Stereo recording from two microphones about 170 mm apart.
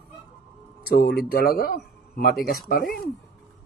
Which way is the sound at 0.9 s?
70° left (ahead or behind).